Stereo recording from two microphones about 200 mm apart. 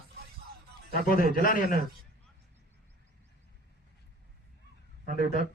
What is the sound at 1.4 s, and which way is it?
Speech, 45° left (ahead or behind).